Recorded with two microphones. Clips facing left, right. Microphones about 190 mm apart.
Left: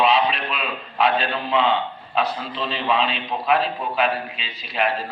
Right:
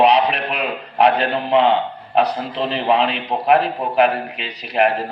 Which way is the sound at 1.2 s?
65° right (ahead or behind).